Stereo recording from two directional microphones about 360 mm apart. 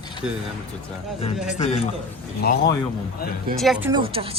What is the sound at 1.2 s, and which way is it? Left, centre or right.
Speech, centre.